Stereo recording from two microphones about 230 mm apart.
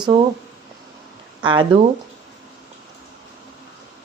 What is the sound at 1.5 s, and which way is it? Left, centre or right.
Speech, right.